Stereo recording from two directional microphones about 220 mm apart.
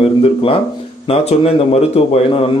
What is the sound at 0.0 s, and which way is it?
A man's voice, 25° left (ahead or behind).